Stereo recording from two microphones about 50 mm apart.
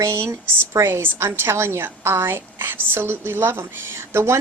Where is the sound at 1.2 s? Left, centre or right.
Right.